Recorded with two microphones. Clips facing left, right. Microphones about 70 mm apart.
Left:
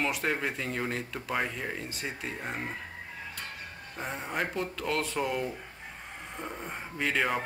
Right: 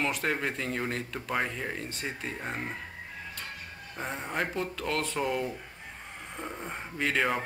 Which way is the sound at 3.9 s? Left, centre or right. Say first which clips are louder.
Right 1 dB; centre.